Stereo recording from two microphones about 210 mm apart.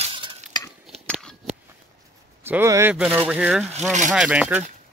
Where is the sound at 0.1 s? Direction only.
25° right (ahead or behind).